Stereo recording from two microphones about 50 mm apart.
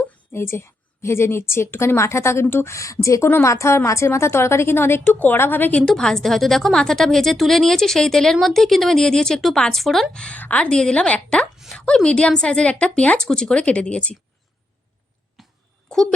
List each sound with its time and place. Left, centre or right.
0.3 s a woman's voice: left
2.4 s a woman's voice: left
2.7 s a woman's voice: left
5.0 s a woman's voice: left
5.9 s a woman's voice: centre
9.4 s speech: centre
10.1 s a woman's voice: centre
10.3 s a woman's voice: left
13.1 s a woman's voice: centre
15.4 s a sound: centre